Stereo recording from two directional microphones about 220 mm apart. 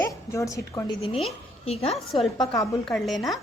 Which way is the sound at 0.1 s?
15° left (ahead or behind).